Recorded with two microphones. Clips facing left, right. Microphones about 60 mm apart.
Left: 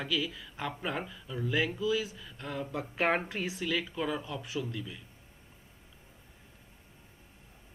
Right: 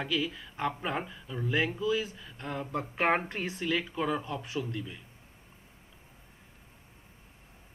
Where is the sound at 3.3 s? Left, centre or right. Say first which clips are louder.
Right 1 dB; centre.